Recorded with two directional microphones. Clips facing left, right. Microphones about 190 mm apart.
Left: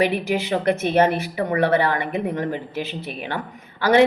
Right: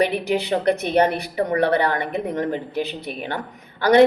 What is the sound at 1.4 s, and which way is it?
A woman's voice, 40° right (ahead or behind).